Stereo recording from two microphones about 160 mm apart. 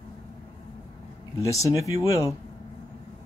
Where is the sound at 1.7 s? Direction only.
20° left (ahead or behind).